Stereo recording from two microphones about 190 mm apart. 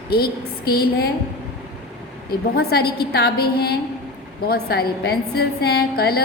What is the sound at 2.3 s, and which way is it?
A woman's voice, 55° left (ahead or behind).